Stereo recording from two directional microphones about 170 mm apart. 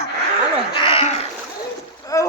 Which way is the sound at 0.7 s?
30° left (ahead or behind).